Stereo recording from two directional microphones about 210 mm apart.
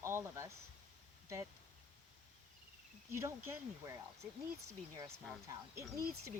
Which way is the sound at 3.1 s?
10° right (ahead or behind).